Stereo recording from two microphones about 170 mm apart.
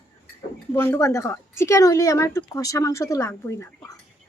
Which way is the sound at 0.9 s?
15° left (ahead or behind).